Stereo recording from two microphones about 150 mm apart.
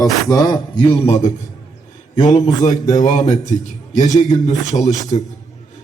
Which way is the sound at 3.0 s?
55° left (ahead or behind).